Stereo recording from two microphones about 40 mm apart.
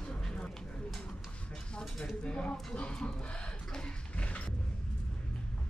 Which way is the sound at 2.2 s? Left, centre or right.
Left.